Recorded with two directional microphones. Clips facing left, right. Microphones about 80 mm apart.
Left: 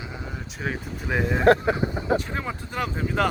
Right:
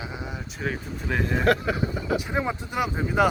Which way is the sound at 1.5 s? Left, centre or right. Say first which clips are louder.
Left 6 dB; left.